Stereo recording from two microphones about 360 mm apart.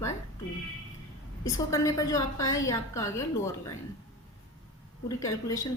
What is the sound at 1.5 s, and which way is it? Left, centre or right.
A woman's voice, centre.